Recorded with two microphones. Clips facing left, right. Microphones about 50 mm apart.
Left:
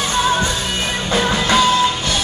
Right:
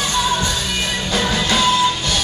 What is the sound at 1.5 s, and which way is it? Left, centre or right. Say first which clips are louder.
Music: left 2 dB; centre.